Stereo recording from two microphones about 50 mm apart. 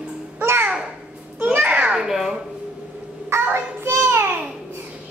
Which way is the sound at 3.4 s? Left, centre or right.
Right.